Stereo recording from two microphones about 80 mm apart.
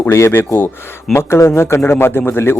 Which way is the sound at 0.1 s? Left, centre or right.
Left.